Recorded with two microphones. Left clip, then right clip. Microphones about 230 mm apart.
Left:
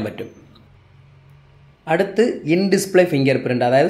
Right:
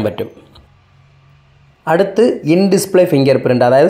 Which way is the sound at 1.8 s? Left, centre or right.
Right.